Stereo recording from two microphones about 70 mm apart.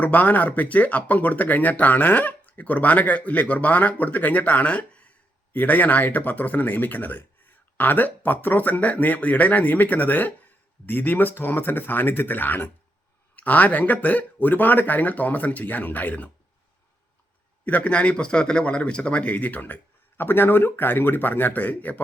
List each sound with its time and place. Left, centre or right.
0.0 s speech: left
17.7 s speech: centre